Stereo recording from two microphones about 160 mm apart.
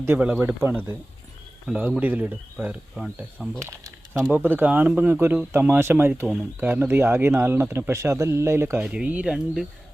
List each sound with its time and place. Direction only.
0.0 s a man's voice: 10° right (ahead or behind)
3.5 s a man's voice: 20° right (ahead or behind); by 9.6 s 5° right (ahead or behind)